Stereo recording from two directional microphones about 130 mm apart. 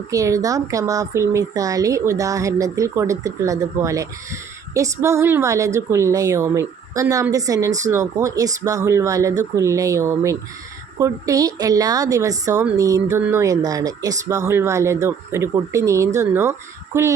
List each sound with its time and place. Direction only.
0.1 s speech: 25° right (ahead or behind)